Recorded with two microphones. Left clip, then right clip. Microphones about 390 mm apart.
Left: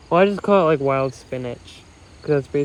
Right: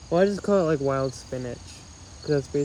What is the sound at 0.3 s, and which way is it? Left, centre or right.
Speech, left.